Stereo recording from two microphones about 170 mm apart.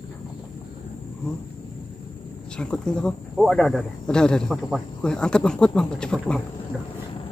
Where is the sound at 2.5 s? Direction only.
5° left (ahead or behind).